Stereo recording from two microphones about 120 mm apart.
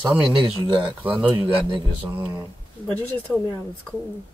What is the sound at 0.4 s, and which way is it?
Speech, 40° right (ahead or behind).